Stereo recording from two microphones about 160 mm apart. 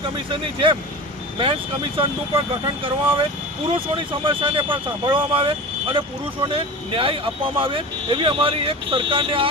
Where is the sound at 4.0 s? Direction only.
30° right (ahead or behind).